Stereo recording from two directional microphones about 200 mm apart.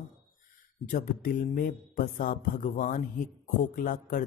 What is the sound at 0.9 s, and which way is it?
A man's voice, 40° left (ahead or behind).